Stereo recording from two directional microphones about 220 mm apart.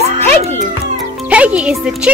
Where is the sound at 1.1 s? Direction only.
5° right (ahead or behind).